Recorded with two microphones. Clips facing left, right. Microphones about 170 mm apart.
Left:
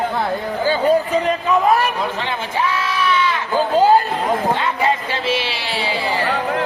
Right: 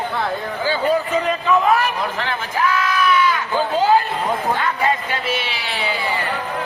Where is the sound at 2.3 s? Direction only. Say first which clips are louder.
Even; 30° left (ahead or behind).